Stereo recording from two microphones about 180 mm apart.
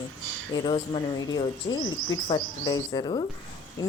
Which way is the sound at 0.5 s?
25° left (ahead or behind).